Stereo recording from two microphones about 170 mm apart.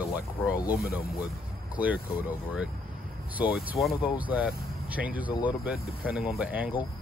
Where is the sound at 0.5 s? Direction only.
60° left (ahead or behind).